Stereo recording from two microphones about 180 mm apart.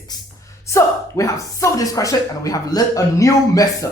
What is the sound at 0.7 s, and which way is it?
Speech, 15° left (ahead or behind).